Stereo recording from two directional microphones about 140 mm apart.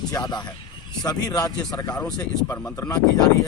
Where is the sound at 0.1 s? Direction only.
30° left (ahead or behind).